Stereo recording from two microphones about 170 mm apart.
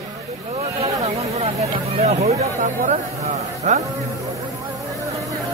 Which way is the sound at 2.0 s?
40° right (ahead or behind).